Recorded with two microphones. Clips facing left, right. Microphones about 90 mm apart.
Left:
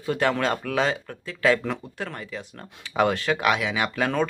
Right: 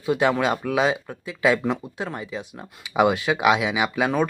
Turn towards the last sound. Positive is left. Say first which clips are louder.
# right 2 dB
turn(degrees=-10)  # may be behind; listen again after turning